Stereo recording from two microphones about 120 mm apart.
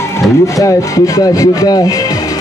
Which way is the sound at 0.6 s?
30° left (ahead or behind).